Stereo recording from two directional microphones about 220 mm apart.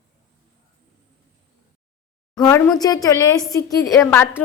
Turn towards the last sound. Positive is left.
turn(degrees=10)  # may be behind; listen again after turning